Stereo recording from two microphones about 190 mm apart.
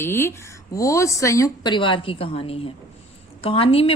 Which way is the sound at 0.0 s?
10° left (ahead or behind).